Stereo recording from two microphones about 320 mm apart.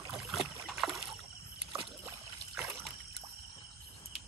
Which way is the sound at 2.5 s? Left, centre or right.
Centre.